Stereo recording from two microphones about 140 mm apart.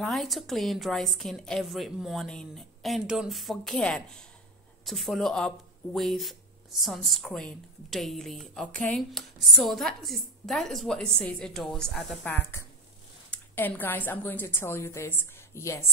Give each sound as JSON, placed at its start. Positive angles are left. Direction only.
{"t": 0.0, "sound": "a woman's voice", "side_deg": 0}
{"t": 12.3, "sound": "a woman's voice", "side_deg": 15}